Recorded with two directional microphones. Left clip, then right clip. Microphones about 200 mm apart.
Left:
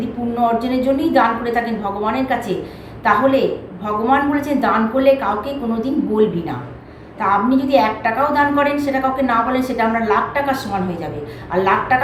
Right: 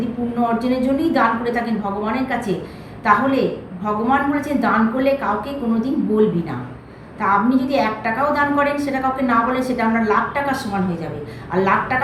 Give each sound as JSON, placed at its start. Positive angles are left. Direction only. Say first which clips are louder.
{"t": 0.3, "sound": "a woman's voice", "louder": "left 3 dB", "side_deg": 5}